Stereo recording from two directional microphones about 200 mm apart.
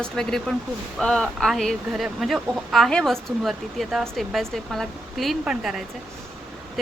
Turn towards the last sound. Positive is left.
turn(degrees=-5)  # may be behind; listen again after turning